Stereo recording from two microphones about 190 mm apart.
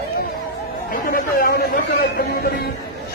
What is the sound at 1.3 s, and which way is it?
Speech, 50° left (ahead or behind).